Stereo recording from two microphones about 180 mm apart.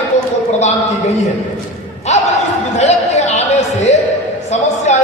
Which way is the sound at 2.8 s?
40° left (ahead or behind).